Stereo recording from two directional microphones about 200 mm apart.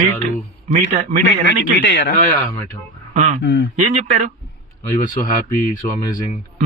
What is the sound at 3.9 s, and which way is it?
Speech, 35° right (ahead or behind).